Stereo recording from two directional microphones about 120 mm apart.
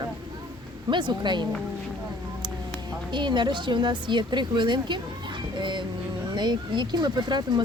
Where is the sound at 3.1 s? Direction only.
40° right (ahead or behind).